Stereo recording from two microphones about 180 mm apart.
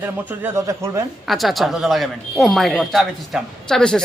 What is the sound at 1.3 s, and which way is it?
Speech, centre (ahead or behind).